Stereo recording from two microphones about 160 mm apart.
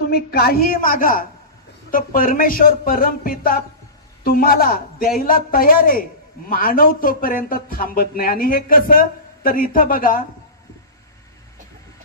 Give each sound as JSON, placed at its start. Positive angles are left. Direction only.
{"t": 0.1, "sound": "speech", "side_deg": 75}